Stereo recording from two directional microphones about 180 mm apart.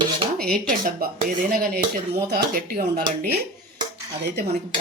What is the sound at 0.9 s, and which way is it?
Speech, 55° right (ahead or behind).